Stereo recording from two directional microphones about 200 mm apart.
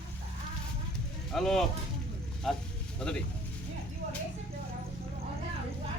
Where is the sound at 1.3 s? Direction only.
Centre (ahead or behind).